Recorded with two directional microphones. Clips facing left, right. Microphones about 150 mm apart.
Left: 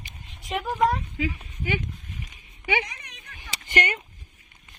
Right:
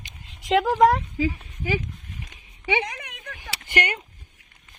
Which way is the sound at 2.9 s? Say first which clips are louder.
Right 7 dB; 65° right (ahead or behind).